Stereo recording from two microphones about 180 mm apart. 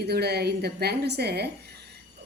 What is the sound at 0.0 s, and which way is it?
A woman's voice, 65° right (ahead or behind).